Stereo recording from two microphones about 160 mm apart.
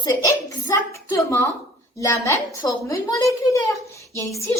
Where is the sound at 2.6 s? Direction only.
20° left (ahead or behind).